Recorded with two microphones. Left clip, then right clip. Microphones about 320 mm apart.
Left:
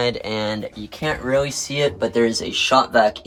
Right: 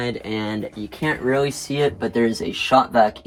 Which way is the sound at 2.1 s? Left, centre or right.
Centre.